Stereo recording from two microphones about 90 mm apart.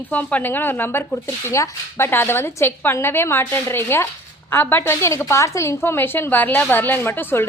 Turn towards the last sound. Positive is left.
turn(degrees=25)  # may be behind; listen again after turning